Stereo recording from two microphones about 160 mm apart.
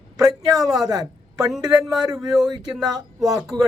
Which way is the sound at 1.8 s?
5° right (ahead or behind).